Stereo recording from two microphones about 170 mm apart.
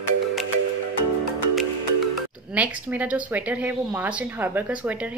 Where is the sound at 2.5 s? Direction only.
10° right (ahead or behind).